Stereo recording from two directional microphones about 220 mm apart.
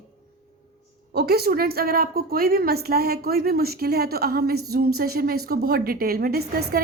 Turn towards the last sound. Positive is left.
turn(degrees=-45)  # may be behind; listen again after turning